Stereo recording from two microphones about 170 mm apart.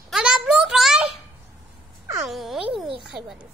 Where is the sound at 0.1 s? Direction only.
5° right (ahead or behind).